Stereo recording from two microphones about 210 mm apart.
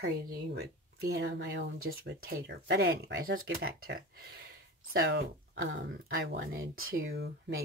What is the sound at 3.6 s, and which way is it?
Speech, 75° right (ahead or behind).